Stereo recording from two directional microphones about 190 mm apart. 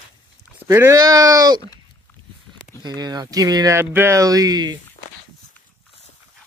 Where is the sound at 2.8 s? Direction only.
20° right (ahead or behind).